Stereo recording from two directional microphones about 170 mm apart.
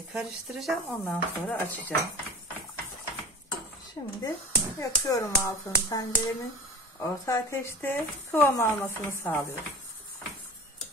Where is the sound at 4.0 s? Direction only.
25° left (ahead or behind).